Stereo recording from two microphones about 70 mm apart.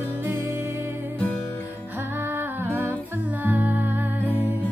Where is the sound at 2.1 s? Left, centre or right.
Right.